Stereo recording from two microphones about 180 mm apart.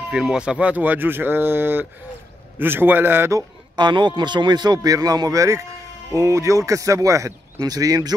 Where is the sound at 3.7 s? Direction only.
25° right (ahead or behind).